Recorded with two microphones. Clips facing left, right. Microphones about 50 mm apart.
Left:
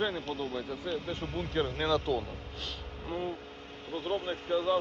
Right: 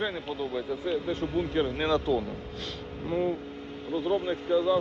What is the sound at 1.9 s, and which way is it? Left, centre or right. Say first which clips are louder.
Speech: right 3 dB; right.